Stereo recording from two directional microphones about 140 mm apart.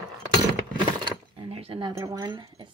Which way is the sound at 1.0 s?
35° right (ahead or behind).